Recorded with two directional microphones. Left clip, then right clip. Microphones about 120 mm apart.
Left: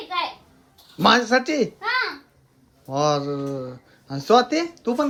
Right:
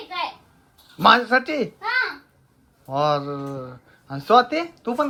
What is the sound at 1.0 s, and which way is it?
Speech, 25° left (ahead or behind).